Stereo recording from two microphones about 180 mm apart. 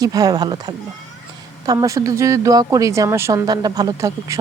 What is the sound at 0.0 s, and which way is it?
Speech, 20° right (ahead or behind).